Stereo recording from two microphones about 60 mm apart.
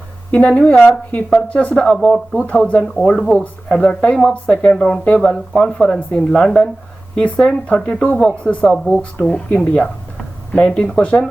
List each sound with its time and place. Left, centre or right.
0.3 s speech: left
3.7 s speech: centre